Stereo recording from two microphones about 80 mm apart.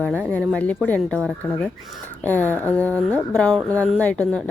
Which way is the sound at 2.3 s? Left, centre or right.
Left.